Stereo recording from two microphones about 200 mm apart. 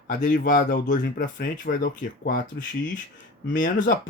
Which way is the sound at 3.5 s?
40° left (ahead or behind).